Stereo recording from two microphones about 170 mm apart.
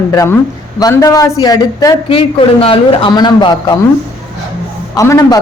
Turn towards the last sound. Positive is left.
turn(degrees=20)  # may be behind; listen again after turning